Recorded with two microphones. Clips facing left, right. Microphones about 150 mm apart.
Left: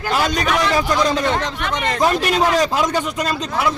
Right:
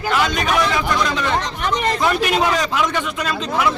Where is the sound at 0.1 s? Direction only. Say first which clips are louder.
Even; 35° left (ahead or behind).